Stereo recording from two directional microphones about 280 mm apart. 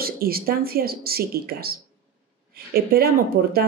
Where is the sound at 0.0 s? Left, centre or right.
Right.